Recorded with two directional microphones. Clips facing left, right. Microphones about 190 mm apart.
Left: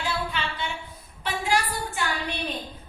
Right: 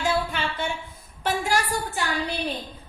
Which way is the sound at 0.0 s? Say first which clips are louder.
Right 4 dB; 50° right (ahead or behind).